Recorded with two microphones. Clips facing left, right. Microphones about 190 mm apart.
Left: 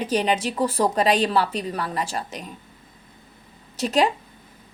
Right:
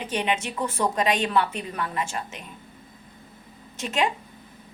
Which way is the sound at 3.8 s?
35° left (ahead or behind).